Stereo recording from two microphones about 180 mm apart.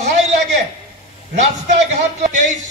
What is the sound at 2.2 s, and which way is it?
Speech, 45° right (ahead or behind).